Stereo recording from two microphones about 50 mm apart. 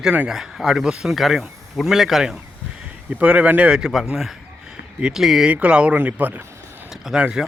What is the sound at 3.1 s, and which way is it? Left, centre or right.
Speech, right.